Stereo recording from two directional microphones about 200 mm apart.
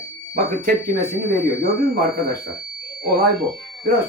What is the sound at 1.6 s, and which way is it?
Speech, 45° right (ahead or behind).